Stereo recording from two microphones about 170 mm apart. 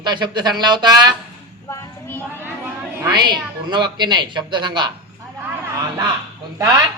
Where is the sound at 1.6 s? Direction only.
15° left (ahead or behind).